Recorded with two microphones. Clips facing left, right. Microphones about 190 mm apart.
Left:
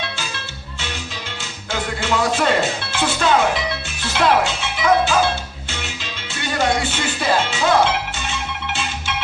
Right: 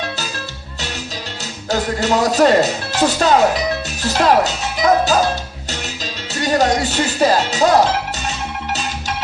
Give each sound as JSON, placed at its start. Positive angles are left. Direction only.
{"t": 1.7, "sound": "speech", "side_deg": -40}
{"t": 6.4, "sound": "music", "side_deg": -40}